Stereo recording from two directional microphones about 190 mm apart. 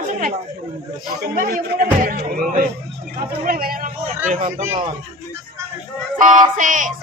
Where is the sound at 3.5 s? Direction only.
50° right (ahead or behind).